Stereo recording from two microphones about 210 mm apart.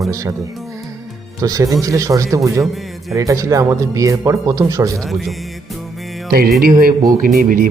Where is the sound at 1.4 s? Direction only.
15° right (ahead or behind).